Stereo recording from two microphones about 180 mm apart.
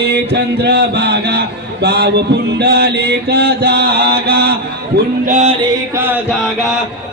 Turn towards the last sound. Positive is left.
turn(degrees=-10)  # may be behind; listen again after turning